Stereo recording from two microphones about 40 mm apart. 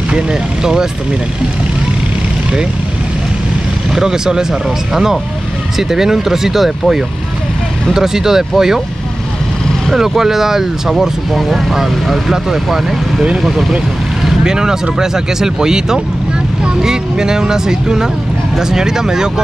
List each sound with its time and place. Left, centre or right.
0.1 s speech: centre
3.9 s speech: centre
9.9 s speech: centre
14.4 s speech: centre